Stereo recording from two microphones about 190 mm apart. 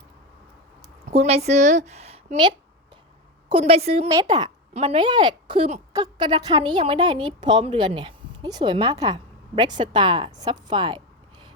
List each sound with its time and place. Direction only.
1.1 s a woman's voice: 35° right (ahead or behind)
3.5 s a woman's voice: 35° right (ahead or behind)
4.1 s a woman's voice: 20° right (ahead or behind)
4.7 s a woman's voice: 35° right (ahead or behind)